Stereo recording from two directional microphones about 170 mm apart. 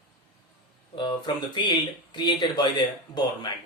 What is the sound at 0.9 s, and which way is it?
Speech, 25° left (ahead or behind).